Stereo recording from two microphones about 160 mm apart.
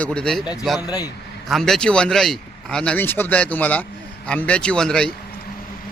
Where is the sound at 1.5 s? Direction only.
Centre (ahead or behind).